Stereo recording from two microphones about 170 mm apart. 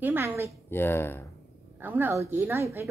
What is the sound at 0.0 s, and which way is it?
Speech, 15° right (ahead or behind).